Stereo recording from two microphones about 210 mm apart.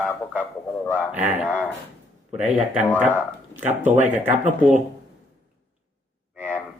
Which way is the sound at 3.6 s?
35° right (ahead or behind).